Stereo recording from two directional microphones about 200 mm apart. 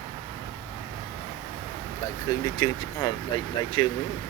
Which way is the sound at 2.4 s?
20° left (ahead or behind).